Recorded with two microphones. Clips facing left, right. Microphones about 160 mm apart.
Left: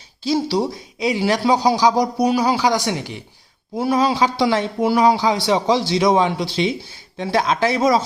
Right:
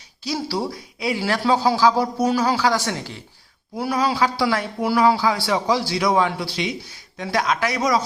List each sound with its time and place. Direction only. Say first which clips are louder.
0.3 s speech: left 6 dB; 25° left (ahead or behind)